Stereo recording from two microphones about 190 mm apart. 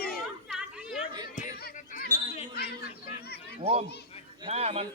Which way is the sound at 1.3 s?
50° left (ahead or behind).